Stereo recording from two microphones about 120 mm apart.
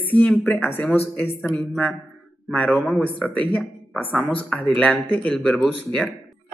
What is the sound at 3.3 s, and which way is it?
Speech, 10° left (ahead or behind).